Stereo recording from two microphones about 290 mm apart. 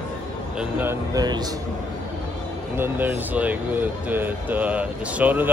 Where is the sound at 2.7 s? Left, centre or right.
Centre.